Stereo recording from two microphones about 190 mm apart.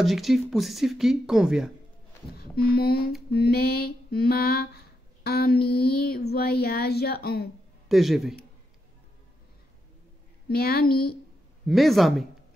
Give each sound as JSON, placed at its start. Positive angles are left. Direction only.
{"t": 0.0, "sound": "speech", "side_deg": 0}
{"t": 2.3, "sound": "speech", "side_deg": 55}
{"t": 3.3, "sound": "a sound", "side_deg": 55}
{"t": 7.9, "sound": "speech", "side_deg": 0}
{"t": 10.5, "sound": "a woman's voice", "side_deg": 55}
{"t": 11.6, "sound": "speech", "side_deg": 0}